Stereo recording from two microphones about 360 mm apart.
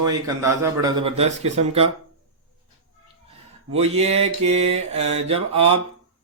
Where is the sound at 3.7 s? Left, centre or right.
Centre.